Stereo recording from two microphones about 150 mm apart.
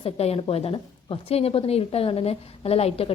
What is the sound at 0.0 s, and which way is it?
A woman's voice, 40° left (ahead or behind).